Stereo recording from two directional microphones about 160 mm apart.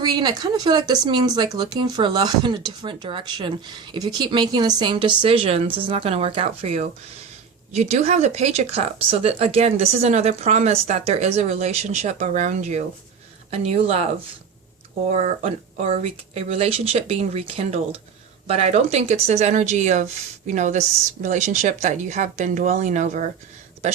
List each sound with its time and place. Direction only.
0.0 s speech: 30° right (ahead or behind)
15.1 s speech: 45° right (ahead or behind)